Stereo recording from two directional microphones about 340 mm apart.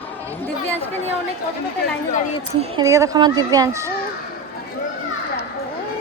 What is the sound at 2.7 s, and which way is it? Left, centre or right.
Speech, centre.